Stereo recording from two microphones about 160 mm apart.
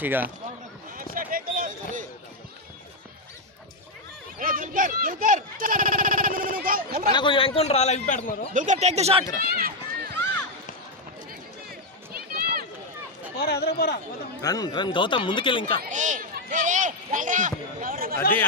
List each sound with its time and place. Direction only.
0.0 s speech: 10° right (ahead or behind)
0.9 s a sound: 60° right (ahead or behind)
4.4 s a sound: 60° right (ahead or behind)
7.1 s a man's voice: 30° left (ahead or behind); by 8.4 s 55° left (ahead or behind)
8.5 s speech: 50° right (ahead or behind)
9.4 s run: 70° right (ahead or behind)
12.1 s run: 70° right (ahead or behind)
13.3 s speech: 80° left
14.4 s a man's voice: 25° left (ahead or behind)
15.9 s speech: 50° right (ahead or behind)
16.3 s a sound: 50° right (ahead or behind)